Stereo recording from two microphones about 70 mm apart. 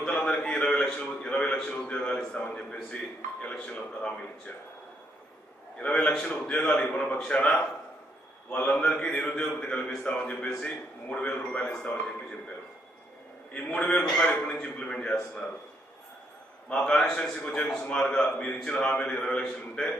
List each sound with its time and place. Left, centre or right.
0.0 s a sound: centre
0.9 s a man's voice: centre
5.8 s a man's voice: centre
8.5 s a man's voice: left
13.5 s a man's voice: centre
16.6 s a man's voice: centre